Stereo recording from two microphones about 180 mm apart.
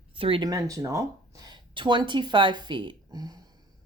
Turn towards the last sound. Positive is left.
turn(degrees=-20)  # may be behind; listen again after turning